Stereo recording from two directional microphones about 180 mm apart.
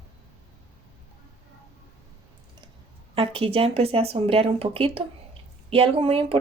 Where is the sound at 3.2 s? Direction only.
30° right (ahead or behind).